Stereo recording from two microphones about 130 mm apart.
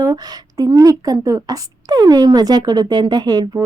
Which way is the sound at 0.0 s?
25° right (ahead or behind).